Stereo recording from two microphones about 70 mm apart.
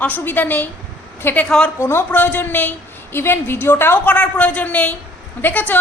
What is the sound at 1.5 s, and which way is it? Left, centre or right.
Speech, centre.